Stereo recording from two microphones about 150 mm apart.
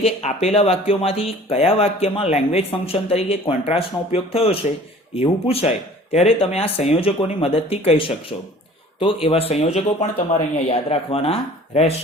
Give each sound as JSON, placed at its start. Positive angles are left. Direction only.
{"t": 0.0, "sound": "speech", "side_deg": 45}